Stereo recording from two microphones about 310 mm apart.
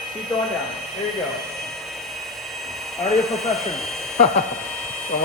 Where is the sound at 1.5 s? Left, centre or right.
Centre.